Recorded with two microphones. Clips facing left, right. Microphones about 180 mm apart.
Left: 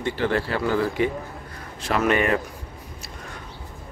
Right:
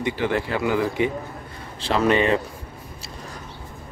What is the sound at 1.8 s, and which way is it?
Speech, 30° right (ahead or behind).